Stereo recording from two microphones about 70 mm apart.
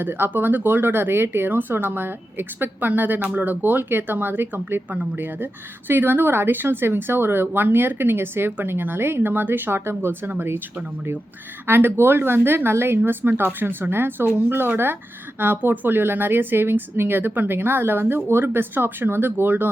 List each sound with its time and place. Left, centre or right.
0.0 s speech: right
11.6 s speech: right